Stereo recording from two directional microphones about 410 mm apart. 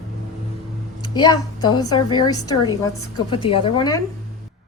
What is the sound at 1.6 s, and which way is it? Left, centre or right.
Speech, centre.